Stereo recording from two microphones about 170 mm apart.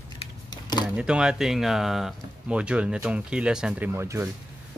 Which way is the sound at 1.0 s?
5° right (ahead or behind).